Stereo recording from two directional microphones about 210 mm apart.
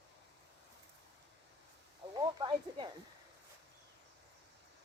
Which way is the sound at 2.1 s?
20° right (ahead or behind).